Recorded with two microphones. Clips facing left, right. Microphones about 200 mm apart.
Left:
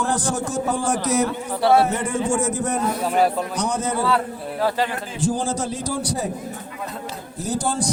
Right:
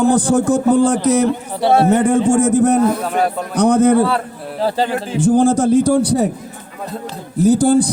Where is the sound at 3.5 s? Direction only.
60° right (ahead or behind).